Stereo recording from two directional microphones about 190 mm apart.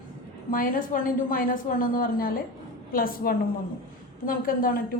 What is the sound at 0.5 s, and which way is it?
A woman's voice, 45° left (ahead or behind).